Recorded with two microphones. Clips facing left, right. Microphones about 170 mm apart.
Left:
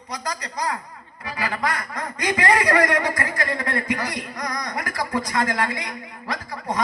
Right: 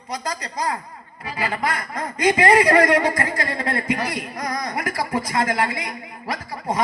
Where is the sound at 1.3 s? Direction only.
20° right (ahead or behind).